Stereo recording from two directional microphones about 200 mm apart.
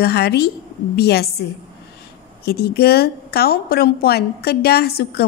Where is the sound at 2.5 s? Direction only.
50° left (ahead or behind).